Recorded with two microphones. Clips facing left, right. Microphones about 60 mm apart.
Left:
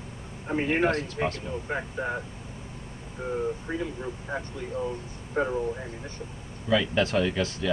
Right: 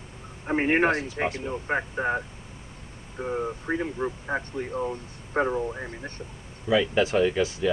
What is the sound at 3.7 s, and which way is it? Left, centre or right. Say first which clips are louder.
Speech: right 4 dB; right.